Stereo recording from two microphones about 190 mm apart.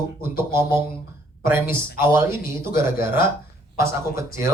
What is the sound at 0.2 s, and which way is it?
Speech, 15° right (ahead or behind).